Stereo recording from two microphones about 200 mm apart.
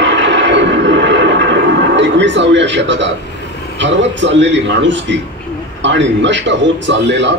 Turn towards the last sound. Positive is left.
turn(degrees=-60)  # may be behind; listen again after turning